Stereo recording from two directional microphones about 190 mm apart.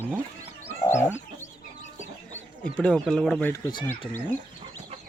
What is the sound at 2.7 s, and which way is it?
Speech, 5° left (ahead or behind).